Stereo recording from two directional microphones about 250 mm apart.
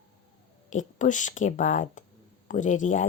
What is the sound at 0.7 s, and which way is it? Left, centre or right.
Speech, left.